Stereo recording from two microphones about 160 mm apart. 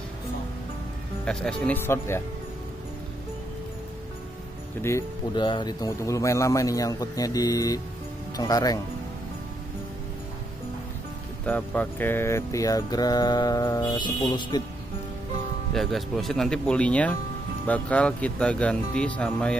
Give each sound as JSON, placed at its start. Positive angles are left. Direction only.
{"t": 1.2, "sound": "speech", "side_deg": 5}
{"t": 5.3, "sound": "speech", "side_deg": 30}
{"t": 11.4, "sound": "speech", "side_deg": 10}
{"t": 15.7, "sound": "speech", "side_deg": 0}